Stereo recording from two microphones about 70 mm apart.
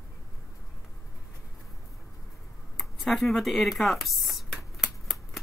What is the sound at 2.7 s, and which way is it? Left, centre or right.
Speech, centre.